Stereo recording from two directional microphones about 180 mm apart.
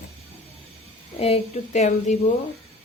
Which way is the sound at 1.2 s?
35° left (ahead or behind).